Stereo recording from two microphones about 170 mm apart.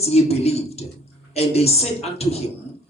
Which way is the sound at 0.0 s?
35° left (ahead or behind).